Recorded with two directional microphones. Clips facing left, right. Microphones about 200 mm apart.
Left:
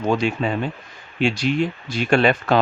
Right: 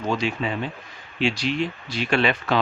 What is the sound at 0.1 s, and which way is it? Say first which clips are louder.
Speech: left 4 dB; 50° left (ahead or behind).